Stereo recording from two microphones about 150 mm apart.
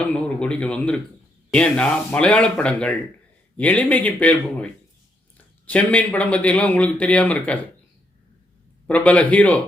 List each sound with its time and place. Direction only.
0.0 s speech: 5° left (ahead or behind)
8.9 s speech: 10° left (ahead or behind)